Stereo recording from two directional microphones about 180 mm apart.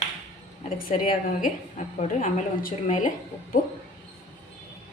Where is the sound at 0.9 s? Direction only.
50° left (ahead or behind).